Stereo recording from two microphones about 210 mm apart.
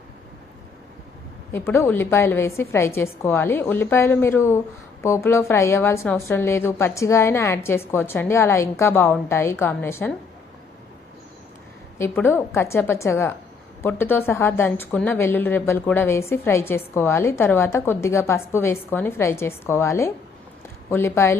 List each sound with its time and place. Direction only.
1.5 s a woman's voice: 10° left (ahead or behind)
11.9 s a woman's voice: 10° left (ahead or behind)